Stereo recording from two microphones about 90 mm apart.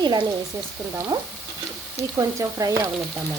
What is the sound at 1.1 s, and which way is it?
Frying, 60° right (ahead or behind).